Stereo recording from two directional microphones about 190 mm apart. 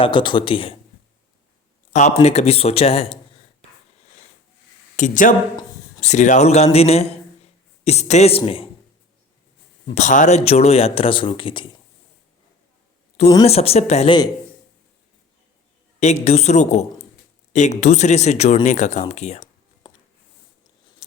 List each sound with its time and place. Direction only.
0.0 s speech: 25° left (ahead or behind)
1.9 s speech: 40° left (ahead or behind)
4.9 s speech: 40° left (ahead or behind)
9.9 s speech: 40° left (ahead or behind)
13.4 s speech: 35° left (ahead or behind)
16.0 s speech: 35° left (ahead or behind)